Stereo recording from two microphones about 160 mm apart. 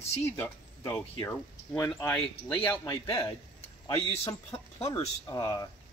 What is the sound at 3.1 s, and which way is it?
Speech, 20° left (ahead or behind).